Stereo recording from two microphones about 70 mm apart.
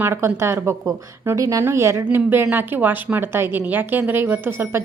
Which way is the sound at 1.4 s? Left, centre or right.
Right.